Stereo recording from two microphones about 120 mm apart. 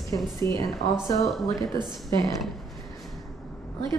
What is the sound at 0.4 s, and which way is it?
A woman's voice, 20° left (ahead or behind).